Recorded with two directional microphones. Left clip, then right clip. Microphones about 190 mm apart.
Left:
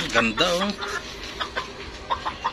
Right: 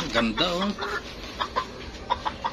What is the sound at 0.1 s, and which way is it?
Speech, 5° left (ahead or behind).